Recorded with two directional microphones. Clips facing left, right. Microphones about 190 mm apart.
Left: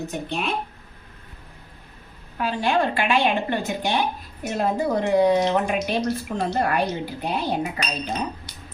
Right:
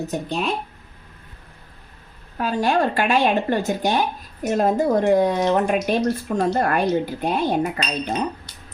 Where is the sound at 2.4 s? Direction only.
40° right (ahead or behind).